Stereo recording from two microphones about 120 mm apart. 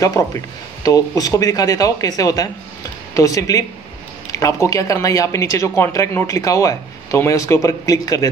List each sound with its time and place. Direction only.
0.0 s speech: 30° left (ahead or behind)